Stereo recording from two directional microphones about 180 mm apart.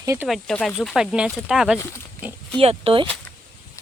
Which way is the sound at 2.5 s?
30° right (ahead or behind).